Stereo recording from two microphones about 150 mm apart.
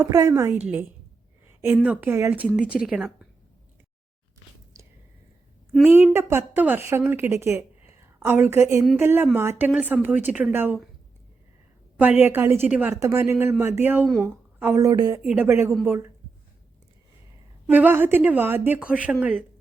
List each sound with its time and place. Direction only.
0.0 s a woman's voice: 20° right (ahead or behind)
0.6 s a woman's voice: 10° right (ahead or behind)
2.6 s speech: 5° right (ahead or behind)
5.8 s a woman's voice: 15° right (ahead or behind)
12.2 s a woman's voice: 15° right (ahead or behind)
15.3 s a woman's voice: 15° right (ahead or behind)
17.7 s a woman's voice: 10° right (ahead or behind)